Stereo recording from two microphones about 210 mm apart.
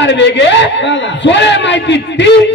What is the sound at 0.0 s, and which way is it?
A man's voice, 55° left (ahead or behind).